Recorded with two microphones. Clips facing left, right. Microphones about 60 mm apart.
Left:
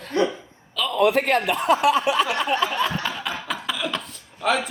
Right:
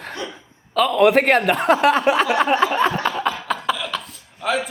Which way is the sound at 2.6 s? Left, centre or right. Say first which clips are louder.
Right 5 dB; right.